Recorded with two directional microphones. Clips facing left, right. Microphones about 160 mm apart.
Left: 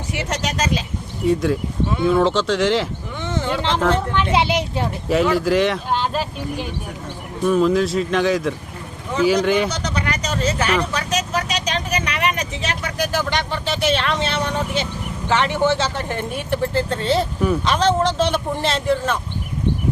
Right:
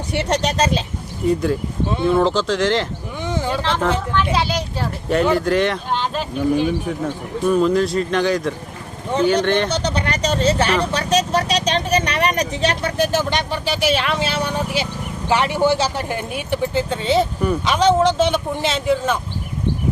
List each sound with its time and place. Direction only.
0.1 s speech: 35° right (ahead or behind)
1.2 s speech: centre (ahead or behind)
3.2 s vehicle: 10° right (ahead or behind)
3.8 s speech: 5° right (ahead or behind)
4.1 s a child's voice: 20° left (ahead or behind)
5.0 s speech: centre (ahead or behind)
9.7 s vehicle: 30° right (ahead or behind)
10.9 s speech: 30° right (ahead or behind); by 19.2 s 5° right (ahead or behind)